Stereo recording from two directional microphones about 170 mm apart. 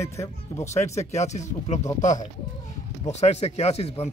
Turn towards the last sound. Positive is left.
turn(degrees=35)  # may be behind; listen again after turning